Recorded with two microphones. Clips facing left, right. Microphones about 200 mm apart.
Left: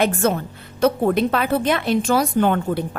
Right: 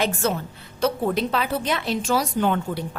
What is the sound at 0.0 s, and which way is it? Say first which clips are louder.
A woman's voice: left 5 dB; 55° left (ahead or behind).